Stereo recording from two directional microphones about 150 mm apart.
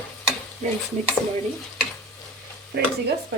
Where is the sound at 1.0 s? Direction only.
50° right (ahead or behind).